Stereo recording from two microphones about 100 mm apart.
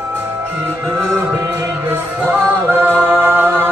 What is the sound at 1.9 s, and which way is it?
Music, 15° right (ahead or behind).